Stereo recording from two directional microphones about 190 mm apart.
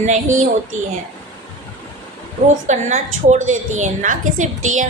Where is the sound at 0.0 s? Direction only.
40° right (ahead or behind).